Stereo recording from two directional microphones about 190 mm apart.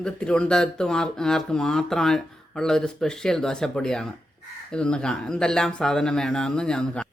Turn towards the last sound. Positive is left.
turn(degrees=5)  # may be behind; listen again after turning